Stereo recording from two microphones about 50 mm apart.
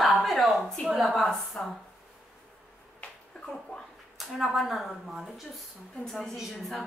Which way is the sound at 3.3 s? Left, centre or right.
Left.